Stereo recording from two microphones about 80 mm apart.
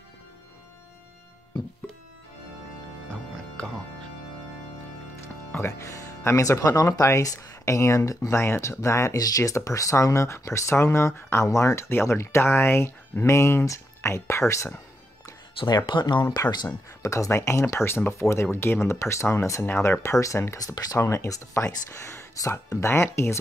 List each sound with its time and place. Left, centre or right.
3.1 s music: centre
5.5 s speech: left
15.6 s speech: left
16.6 s speech: left
19.6 s speech: left
20.0 s speech: left
20.5 s speech: left